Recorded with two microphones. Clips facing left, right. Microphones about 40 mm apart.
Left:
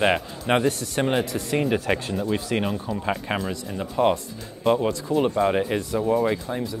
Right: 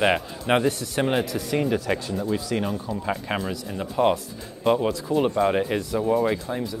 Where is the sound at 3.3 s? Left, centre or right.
Centre.